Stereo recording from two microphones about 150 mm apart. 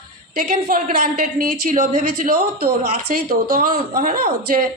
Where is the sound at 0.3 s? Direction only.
60° right (ahead or behind).